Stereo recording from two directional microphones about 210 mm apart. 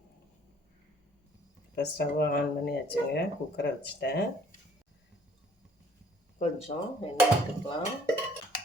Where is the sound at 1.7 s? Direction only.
50° left (ahead or behind).